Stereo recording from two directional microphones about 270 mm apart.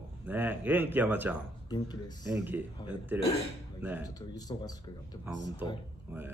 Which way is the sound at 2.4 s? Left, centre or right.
Centre.